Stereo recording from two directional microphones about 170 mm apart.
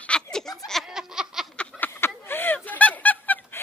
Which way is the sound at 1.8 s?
10° left (ahead or behind).